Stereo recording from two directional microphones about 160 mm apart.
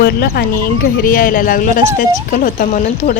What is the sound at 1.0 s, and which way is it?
Speech, 60° left (ahead or behind).